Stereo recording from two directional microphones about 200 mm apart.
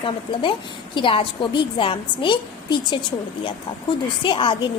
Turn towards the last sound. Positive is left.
turn(degrees=25)  # may be behind; listen again after turning